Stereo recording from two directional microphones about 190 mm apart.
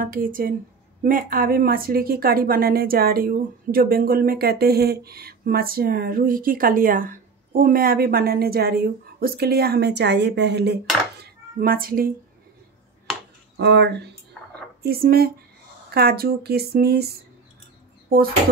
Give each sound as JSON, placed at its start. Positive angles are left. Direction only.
{"t": 0.0, "sound": "speech", "side_deg": -50}
{"t": 11.6, "sound": "speech", "side_deg": -50}
{"t": 13.6, "sound": "speech", "side_deg": -60}